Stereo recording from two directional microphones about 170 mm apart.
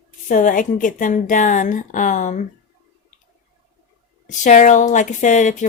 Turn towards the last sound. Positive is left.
turn(degrees=45)  # may be behind; listen again after turning